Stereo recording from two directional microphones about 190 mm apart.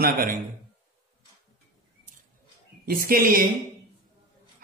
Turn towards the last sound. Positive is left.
turn(degrees=-50)  # may be behind; listen again after turning